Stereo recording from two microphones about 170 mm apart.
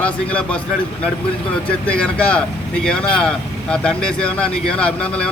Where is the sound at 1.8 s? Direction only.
5° left (ahead or behind).